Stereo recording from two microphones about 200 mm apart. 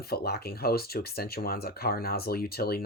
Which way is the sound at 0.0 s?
50° left (ahead or behind).